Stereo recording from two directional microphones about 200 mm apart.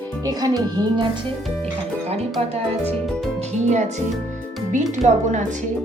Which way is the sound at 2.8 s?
5° left (ahead or behind).